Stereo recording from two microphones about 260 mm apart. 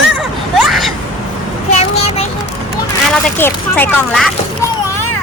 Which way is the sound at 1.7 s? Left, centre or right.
Left.